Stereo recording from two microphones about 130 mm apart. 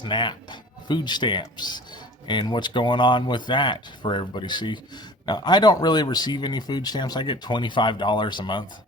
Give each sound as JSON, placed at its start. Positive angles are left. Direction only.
{"t": 0.0, "sound": "speech", "side_deg": 35}